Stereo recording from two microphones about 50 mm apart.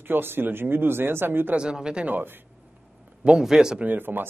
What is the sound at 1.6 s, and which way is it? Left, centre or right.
Speech, centre.